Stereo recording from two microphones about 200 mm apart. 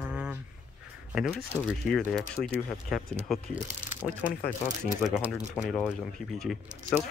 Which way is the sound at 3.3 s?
Centre (ahead or behind).